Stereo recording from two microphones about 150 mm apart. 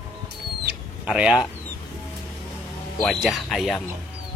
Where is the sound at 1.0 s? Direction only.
5° right (ahead or behind).